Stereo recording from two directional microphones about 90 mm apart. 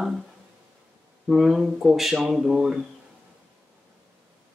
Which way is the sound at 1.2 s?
5° right (ahead or behind).